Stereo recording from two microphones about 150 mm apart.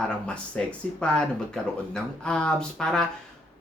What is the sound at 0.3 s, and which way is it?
Speech, 5° left (ahead or behind).